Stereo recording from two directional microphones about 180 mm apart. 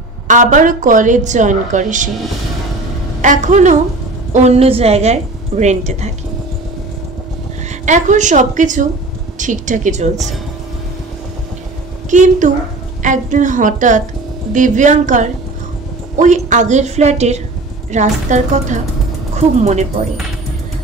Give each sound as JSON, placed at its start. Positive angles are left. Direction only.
{"t": 0.3, "sound": "a woman's voice", "side_deg": -45}
{"t": 3.2, "sound": "a woman's voice", "side_deg": -45}
{"t": 7.8, "sound": "a woman's voice", "side_deg": -40}
{"t": 12.1, "sound": "a woman's voice", "side_deg": -45}